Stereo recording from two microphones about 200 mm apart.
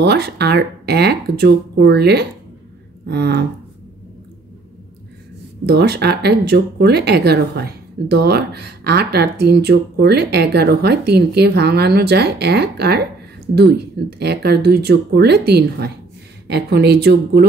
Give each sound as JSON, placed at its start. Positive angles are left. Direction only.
{"t": 0.0, "sound": "speech", "side_deg": -55}
{"t": 5.7, "sound": "speech", "side_deg": -55}
{"t": 14.1, "sound": "speech", "side_deg": -55}